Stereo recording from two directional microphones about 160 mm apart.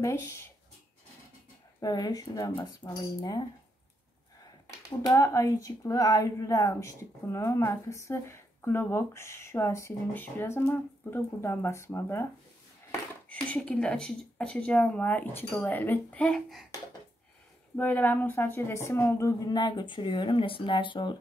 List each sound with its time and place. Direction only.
0.0 s speech: 15° left (ahead or behind)
1.8 s a woman's voice: 25° left (ahead or behind)
5.0 s speech: 20° left (ahead or behind)
13.3 s speech: 10° left (ahead or behind)
17.7 s a woman's voice: 10° left (ahead or behind); by 21.2 s 30° left (ahead or behind)